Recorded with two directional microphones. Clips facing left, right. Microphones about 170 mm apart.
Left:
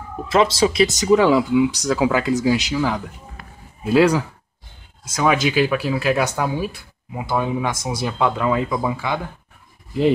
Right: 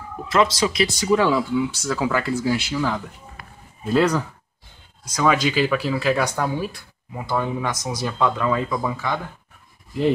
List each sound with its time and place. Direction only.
0.4 s speech: 25° left (ahead or behind)
7.7 s speech: 30° left (ahead or behind)
8.0 s speech: 15° left (ahead or behind)